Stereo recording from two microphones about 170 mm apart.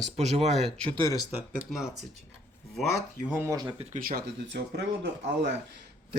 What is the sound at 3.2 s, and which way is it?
Speech, 15° right (ahead or behind).